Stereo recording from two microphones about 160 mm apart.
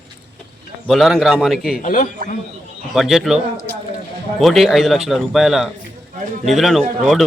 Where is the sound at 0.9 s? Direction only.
Centre (ahead or behind).